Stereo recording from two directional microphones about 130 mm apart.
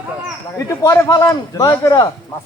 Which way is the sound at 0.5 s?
25° left (ahead or behind).